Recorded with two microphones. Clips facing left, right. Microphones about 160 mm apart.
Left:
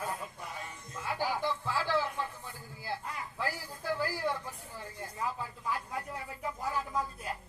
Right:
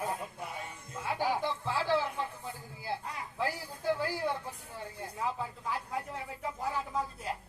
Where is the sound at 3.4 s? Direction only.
25° right (ahead or behind).